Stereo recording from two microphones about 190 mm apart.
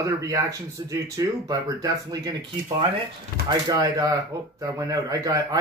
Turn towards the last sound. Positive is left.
turn(degrees=-20)  # may be behind; listen again after turning